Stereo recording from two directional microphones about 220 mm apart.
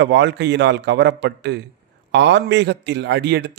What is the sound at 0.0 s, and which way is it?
A man's voice, 50° right (ahead or behind).